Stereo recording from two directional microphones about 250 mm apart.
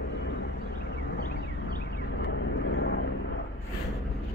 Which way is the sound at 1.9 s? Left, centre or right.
Left.